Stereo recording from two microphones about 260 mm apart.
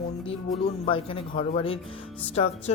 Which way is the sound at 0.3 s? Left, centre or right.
Left.